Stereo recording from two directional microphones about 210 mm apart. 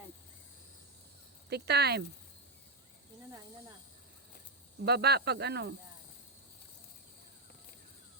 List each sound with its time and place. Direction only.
1.5 s speech: 50° right (ahead or behind)
4.9 s speech: 50° right (ahead or behind)